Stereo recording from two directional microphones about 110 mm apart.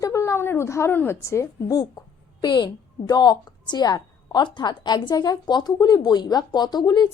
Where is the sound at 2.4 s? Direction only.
40° left (ahead or behind).